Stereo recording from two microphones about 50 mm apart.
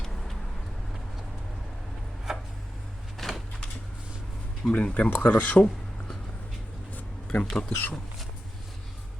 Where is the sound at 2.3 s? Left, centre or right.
Centre.